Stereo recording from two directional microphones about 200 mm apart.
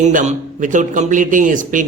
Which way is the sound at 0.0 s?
35° right (ahead or behind).